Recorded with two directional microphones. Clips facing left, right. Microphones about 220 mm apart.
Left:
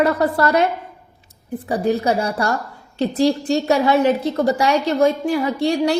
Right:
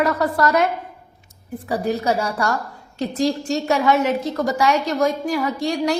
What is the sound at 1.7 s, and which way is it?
A woman's voice, 30° left (ahead or behind).